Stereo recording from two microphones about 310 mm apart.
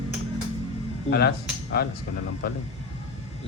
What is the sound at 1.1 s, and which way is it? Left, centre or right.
Speech, left.